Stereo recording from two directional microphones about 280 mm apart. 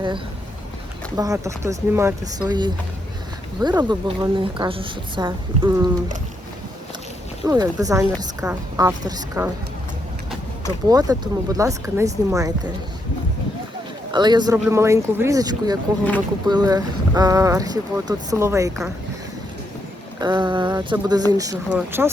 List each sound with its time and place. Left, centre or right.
1.1 s a woman's voice: centre
7.4 s a woman's voice: centre
10.8 s a woman's voice: centre
14.1 s a woman's voice: centre
20.1 s a woman's voice: centre